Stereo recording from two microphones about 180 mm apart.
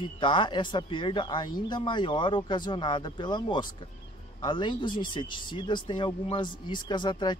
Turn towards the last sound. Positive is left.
turn(degrees=25)  # may be behind; listen again after turning